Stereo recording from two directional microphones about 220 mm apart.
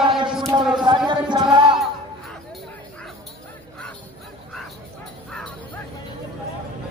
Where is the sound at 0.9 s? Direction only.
20° right (ahead or behind).